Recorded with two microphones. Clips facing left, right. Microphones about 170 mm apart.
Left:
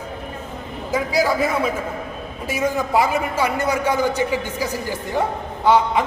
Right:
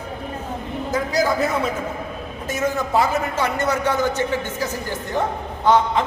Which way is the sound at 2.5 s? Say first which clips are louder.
Left 1 dB; 10° left (ahead or behind).